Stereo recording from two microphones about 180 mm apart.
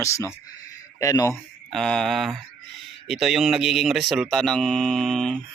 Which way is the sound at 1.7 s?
5° left (ahead or behind).